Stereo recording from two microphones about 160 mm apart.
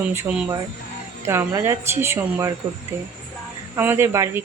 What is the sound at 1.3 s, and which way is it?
Speech, 15° right (ahead or behind).